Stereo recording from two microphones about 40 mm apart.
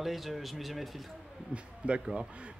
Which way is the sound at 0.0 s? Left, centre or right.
Centre.